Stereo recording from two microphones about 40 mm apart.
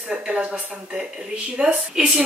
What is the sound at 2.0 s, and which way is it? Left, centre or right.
Speech, centre.